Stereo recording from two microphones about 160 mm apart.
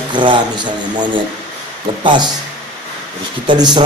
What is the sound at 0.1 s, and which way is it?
A man's voice, 30° right (ahead or behind).